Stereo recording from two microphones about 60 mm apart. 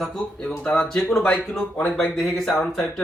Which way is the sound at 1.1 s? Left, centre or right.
Centre.